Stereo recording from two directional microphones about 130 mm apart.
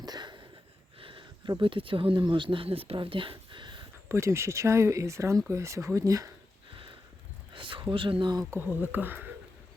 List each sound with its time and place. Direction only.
0.0 s a sound: 35° right (ahead or behind)
0.9 s speech: 40° right (ahead or behind)
4.1 s speech: 20° right (ahead or behind)
7.5 s speech: 40° right (ahead or behind)
8.4 s speech: 15° right (ahead or behind)